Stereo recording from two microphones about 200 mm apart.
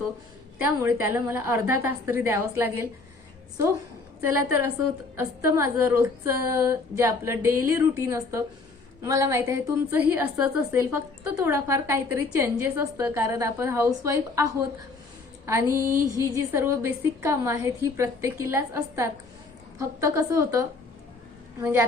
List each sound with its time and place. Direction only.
0.6 s a woman's voice: 10° right (ahead or behind)
5.1 s a woman's voice: 15° right (ahead or behind)
15.4 s a woman's voice: 15° right (ahead or behind)